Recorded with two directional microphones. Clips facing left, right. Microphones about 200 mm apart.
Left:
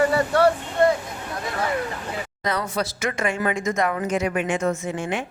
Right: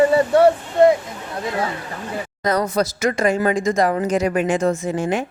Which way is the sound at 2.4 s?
40° right (ahead or behind).